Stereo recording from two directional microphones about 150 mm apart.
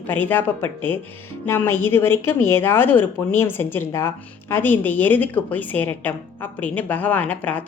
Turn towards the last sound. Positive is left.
turn(degrees=10)  # may be behind; listen again after turning